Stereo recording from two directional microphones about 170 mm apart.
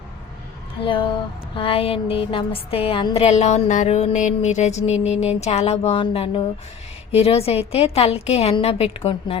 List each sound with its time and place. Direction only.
0.9 s music: 30° left (ahead or behind)
3.2 s music: 40° left (ahead or behind)